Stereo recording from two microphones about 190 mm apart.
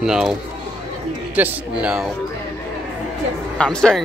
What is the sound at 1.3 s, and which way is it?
Speech, 5° right (ahead or behind).